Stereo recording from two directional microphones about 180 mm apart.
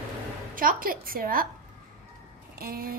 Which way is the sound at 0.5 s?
50° right (ahead or behind).